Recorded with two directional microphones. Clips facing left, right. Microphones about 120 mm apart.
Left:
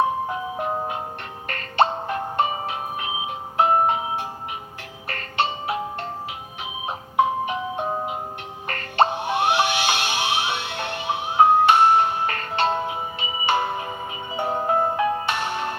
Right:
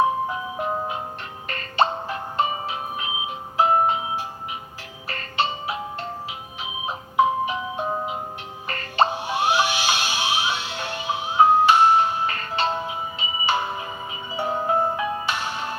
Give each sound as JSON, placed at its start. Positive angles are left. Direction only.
{"t": 0.3, "sound": "music", "side_deg": 45}